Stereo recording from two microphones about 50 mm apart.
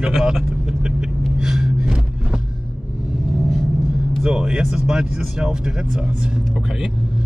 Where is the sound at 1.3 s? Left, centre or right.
Centre.